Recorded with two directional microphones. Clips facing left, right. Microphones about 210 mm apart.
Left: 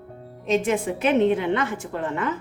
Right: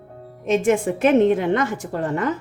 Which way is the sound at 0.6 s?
50° right (ahead or behind).